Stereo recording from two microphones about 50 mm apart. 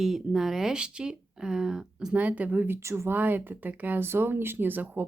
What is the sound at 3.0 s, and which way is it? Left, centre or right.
Speech, right.